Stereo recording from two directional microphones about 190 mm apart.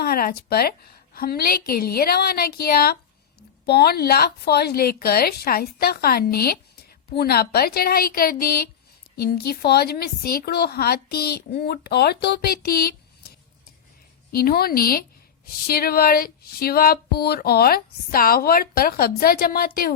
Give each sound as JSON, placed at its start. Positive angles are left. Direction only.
{"t": 0.0, "sound": "a woman's voice", "side_deg": 50}
{"t": 14.3, "sound": "speech", "side_deg": 50}